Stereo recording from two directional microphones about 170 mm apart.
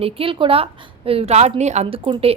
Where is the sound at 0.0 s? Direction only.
30° right (ahead or behind).